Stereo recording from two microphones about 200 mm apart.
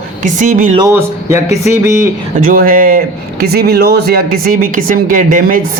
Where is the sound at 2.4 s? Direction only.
45° right (ahead or behind).